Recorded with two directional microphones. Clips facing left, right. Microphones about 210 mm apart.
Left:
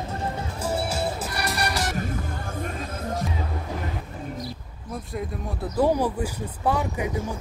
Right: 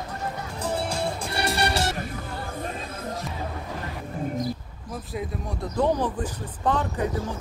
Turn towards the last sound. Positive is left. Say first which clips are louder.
# even
turn(degrees=10)  # may be behind; listen again after turning